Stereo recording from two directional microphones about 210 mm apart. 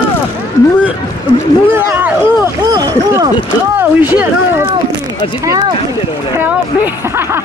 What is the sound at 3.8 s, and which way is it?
Speech, 10° right (ahead or behind).